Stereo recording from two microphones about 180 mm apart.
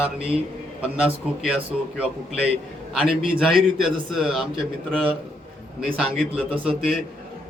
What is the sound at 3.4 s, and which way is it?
Speech, centre (ahead or behind).